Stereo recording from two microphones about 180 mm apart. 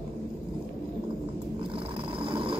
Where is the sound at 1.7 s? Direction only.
30° right (ahead or behind).